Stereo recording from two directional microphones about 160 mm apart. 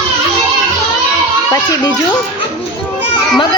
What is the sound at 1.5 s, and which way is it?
Speech, 25° left (ahead or behind).